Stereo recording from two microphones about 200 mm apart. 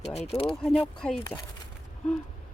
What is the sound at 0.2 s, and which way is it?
Speech, 30° left (ahead or behind).